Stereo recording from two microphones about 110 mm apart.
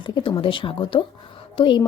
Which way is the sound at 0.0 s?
45° left (ahead or behind).